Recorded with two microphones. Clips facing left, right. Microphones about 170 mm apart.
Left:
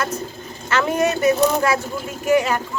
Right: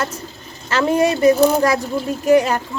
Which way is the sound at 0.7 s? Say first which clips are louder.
Right 3 dB; 30° right (ahead or behind).